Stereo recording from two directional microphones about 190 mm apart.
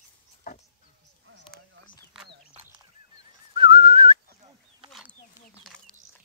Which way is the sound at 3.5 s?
25° right (ahead or behind).